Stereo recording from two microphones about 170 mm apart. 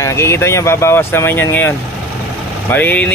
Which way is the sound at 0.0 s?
15° left (ahead or behind).